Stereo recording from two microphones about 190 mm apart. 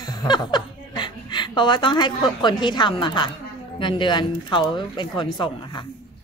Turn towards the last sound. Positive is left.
turn(degrees=25)  # may be behind; listen again after turning